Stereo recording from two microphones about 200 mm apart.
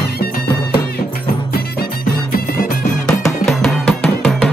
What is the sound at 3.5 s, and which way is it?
Music, centre (ahead or behind).